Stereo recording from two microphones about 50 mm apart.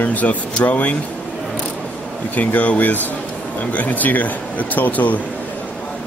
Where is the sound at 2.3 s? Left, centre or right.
Left.